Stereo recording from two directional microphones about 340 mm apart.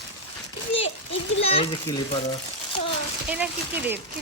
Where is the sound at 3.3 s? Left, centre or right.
Centre.